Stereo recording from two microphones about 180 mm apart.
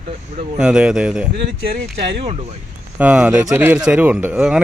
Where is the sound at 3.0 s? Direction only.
5° right (ahead or behind).